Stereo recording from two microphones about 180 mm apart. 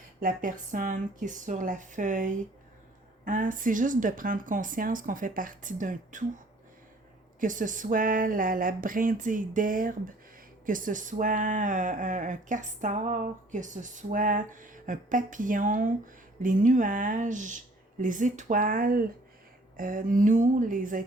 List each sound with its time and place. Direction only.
0.2 s speech: 45° right (ahead or behind)